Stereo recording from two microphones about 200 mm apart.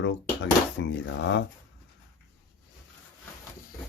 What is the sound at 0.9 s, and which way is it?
Speech, 65° left (ahead or behind).